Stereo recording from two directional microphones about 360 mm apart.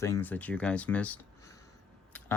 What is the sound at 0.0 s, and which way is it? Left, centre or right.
Speech, centre.